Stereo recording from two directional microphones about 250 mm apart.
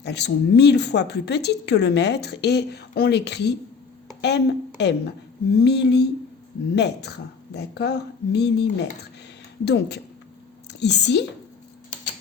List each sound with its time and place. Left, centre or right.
0.0 s a woman's voice: left